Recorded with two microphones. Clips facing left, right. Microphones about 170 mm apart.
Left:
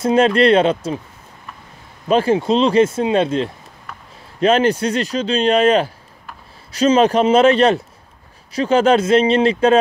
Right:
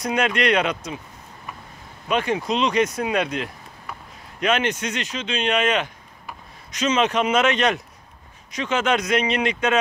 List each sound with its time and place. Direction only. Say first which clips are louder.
0.0 s speech: left 9 dB; 30° left (ahead or behind)
2.0 s speech: left 8 dB; 30° left (ahead or behind)